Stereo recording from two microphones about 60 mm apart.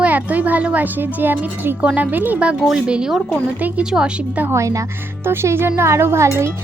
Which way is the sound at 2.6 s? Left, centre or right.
Centre.